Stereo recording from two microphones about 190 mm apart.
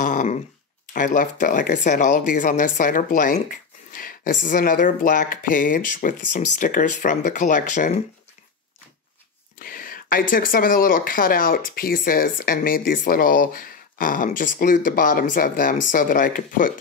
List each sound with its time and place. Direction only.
0.0 s a sound: 40° left (ahead or behind)
0.9 s speech: 45° left (ahead or behind)
9.6 s speech: 45° left (ahead or behind)